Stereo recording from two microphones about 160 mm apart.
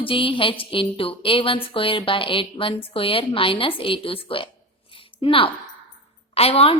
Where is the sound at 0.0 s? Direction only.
35° left (ahead or behind).